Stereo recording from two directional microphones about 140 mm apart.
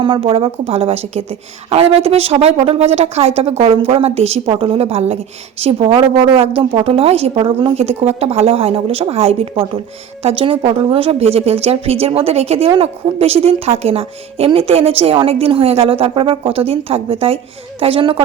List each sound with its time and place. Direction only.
0.0 s a woman's voice: 35° right (ahead or behind)